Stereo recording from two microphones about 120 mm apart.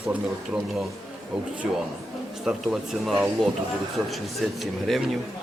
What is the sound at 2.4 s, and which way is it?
Speech, centre (ahead or behind).